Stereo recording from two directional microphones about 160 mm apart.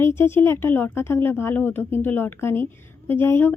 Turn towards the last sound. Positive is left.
turn(degrees=15)  # may be behind; listen again after turning